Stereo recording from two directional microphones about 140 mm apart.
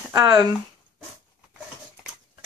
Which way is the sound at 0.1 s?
25° right (ahead or behind).